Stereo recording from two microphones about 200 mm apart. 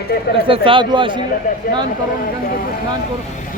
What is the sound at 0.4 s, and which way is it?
Speech, 25° right (ahead or behind).